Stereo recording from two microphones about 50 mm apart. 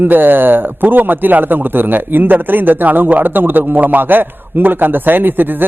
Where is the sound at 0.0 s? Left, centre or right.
Right.